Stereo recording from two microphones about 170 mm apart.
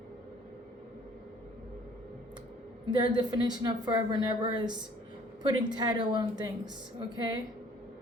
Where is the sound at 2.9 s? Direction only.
25° right (ahead or behind).